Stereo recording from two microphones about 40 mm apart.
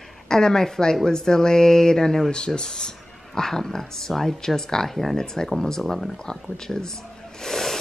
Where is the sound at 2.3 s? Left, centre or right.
Left.